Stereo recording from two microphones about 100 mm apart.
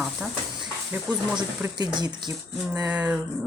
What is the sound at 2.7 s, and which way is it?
Speech, 15° right (ahead or behind).